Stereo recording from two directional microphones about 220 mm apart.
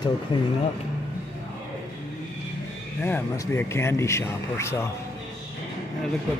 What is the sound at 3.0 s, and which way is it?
Speech, 10° left (ahead or behind).